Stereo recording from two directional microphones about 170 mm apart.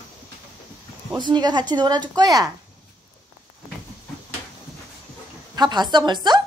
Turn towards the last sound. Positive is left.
turn(degrees=-25)  # may be behind; listen again after turning